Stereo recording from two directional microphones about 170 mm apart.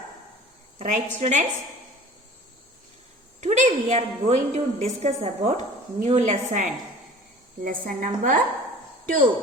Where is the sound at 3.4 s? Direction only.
45° right (ahead or behind).